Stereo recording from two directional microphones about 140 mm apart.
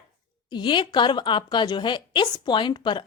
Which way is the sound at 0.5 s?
35° left (ahead or behind).